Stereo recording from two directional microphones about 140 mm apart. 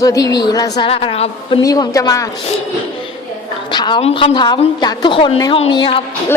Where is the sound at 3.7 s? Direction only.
30° left (ahead or behind).